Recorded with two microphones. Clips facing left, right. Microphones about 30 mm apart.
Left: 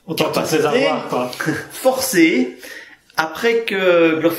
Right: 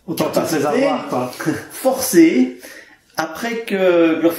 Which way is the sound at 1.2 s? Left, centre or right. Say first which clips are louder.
Even; left.